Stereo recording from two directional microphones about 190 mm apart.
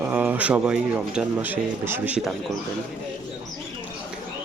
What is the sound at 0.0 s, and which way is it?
Speech, 10° right (ahead or behind).